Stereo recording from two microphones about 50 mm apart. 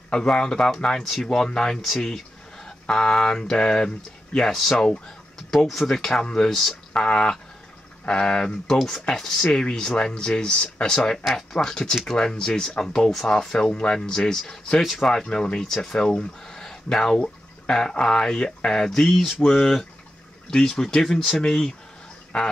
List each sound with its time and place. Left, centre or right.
0.1 s speech: centre
5.5 s speech: centre
14.8 s speech: centre
15.3 s speech: centre